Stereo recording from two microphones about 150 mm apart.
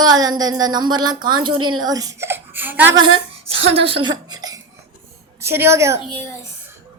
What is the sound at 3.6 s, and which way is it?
A child's voice, 40° right (ahead or behind).